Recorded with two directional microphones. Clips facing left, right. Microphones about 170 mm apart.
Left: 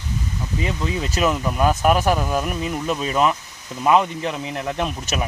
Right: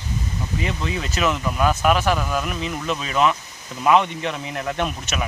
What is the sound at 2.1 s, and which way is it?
Speech, 40° left (ahead or behind).